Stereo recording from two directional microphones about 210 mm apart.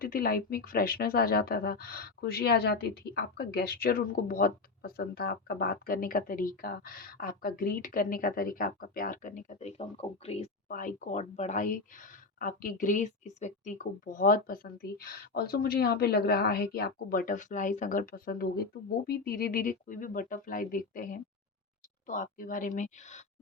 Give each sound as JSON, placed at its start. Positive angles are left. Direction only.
{"t": 0.0, "sound": "speech", "side_deg": 45}